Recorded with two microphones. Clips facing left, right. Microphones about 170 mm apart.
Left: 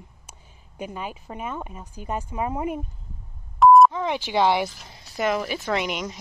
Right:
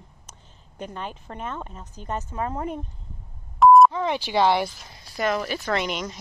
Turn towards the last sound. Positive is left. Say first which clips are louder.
# even
turn(degrees=15)  # may be behind; listen again after turning